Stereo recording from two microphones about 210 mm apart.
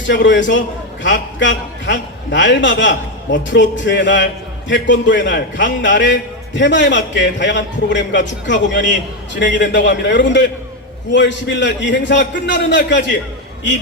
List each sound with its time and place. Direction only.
0.1 s a man's voice: 60° left (ahead or behind)